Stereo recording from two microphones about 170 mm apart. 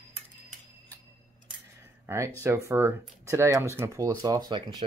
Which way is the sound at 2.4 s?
15° right (ahead or behind).